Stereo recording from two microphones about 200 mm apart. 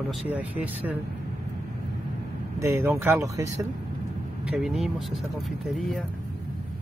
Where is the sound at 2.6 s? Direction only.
10° right (ahead or behind).